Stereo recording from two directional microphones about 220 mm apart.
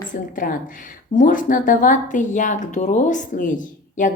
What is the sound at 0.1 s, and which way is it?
A woman's voice, 35° left (ahead or behind).